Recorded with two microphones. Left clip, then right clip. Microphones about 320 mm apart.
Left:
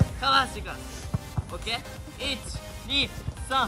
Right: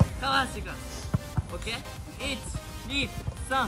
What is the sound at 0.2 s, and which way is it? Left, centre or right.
Speech, centre.